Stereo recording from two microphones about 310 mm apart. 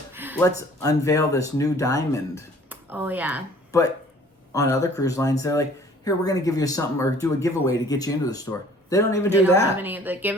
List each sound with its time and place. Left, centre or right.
0.1 s a sound: centre
0.3 s speech: centre
2.6 s speech: centre
3.7 s speech: centre
9.8 s speech: centre